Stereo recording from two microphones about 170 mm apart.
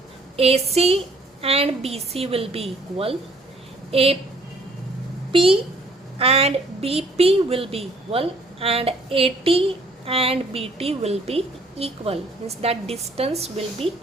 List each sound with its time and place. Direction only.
0.3 s a woman's voice: 35° right (ahead or behind)
5.3 s a woman's voice: 30° right (ahead or behind)